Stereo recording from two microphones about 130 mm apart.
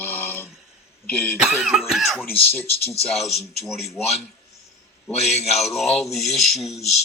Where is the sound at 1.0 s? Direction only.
15° left (ahead or behind).